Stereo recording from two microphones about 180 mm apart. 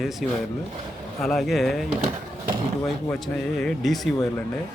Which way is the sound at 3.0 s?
Centre (ahead or behind).